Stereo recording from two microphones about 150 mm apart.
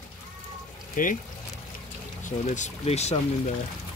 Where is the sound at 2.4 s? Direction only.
50° left (ahead or behind).